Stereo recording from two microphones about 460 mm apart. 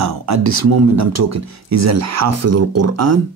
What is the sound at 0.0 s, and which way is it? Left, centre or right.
Speech, right.